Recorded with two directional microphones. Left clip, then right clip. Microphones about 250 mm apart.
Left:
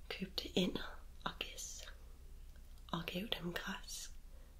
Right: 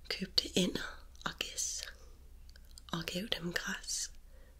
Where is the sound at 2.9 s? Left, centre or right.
Right.